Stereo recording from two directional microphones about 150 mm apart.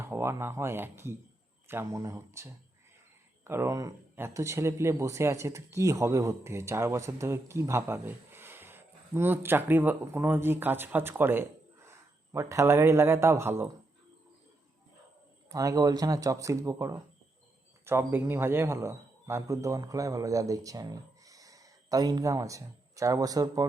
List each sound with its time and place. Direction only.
0.0 s speech: 15° right (ahead or behind)
15.4 s a man's voice: 25° right (ahead or behind)